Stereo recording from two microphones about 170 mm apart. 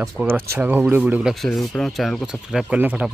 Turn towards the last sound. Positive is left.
turn(degrees=-5)  # may be behind; listen again after turning